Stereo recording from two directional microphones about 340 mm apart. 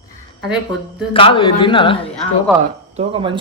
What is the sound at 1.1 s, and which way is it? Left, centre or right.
Speech, centre.